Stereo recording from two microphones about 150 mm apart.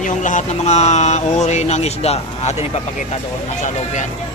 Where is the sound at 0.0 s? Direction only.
55° left (ahead or behind).